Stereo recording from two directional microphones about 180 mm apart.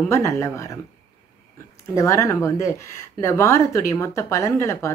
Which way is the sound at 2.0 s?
15° left (ahead or behind).